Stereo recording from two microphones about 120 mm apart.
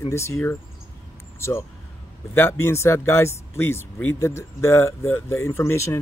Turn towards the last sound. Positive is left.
turn(degrees=25)  # may be behind; listen again after turning